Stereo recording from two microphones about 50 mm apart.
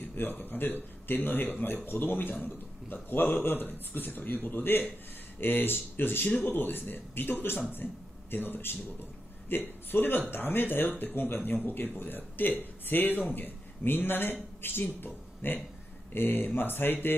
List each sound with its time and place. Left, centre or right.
0.1 s a man's voice: left